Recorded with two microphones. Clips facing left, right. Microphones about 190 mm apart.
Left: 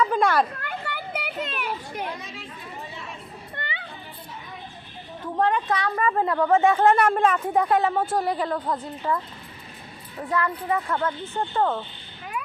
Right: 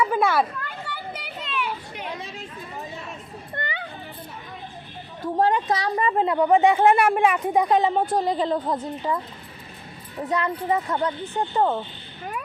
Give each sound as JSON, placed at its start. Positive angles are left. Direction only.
{"t": 0.0, "sound": "a child's voice", "side_deg": -5}
{"t": 0.6, "sound": "children playing", "side_deg": 55}
{"t": 3.5, "sound": "music", "side_deg": -45}
{"t": 5.4, "sound": "a woman's voice", "side_deg": -30}